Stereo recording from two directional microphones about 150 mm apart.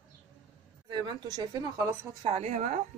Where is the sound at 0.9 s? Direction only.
30° right (ahead or behind).